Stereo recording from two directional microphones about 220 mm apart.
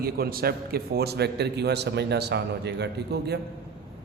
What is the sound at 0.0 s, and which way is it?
A man's voice, 45° right (ahead or behind).